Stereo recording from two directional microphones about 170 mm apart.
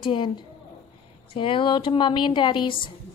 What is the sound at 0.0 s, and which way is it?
Speech, 30° left (ahead or behind).